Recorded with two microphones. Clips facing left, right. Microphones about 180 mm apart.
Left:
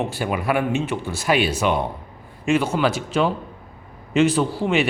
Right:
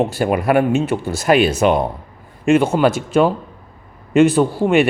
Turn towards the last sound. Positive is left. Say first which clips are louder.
# right 6 dB
turn(degrees=-50)  # may be behind; listen again after turning